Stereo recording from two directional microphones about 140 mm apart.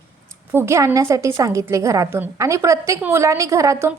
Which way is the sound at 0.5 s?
20° right (ahead or behind).